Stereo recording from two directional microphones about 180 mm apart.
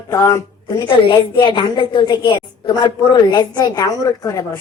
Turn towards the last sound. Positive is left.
turn(degrees=20)  # may be behind; listen again after turning